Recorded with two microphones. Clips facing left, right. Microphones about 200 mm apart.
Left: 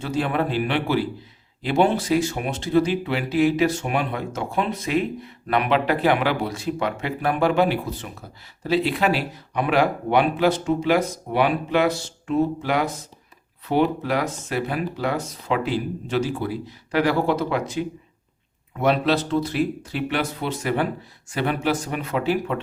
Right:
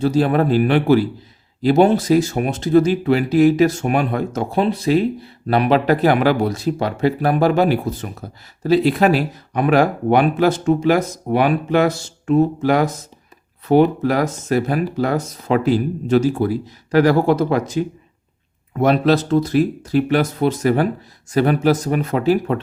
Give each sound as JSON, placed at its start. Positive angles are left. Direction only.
{"t": 0.0, "sound": "speech", "side_deg": -35}